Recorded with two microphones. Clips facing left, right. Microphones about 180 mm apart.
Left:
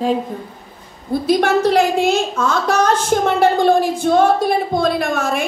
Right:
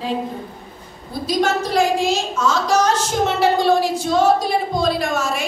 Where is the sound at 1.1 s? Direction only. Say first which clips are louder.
Left 5 dB; 60° left (ahead or behind).